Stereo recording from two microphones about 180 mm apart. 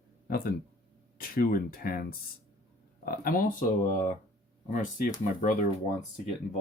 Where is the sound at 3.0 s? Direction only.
55° left (ahead or behind).